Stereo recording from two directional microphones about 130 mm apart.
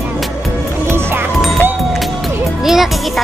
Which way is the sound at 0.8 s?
20° right (ahead or behind).